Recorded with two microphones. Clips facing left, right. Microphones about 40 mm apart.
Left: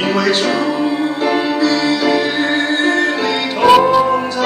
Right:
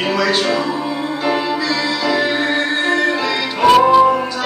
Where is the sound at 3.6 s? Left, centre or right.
Centre.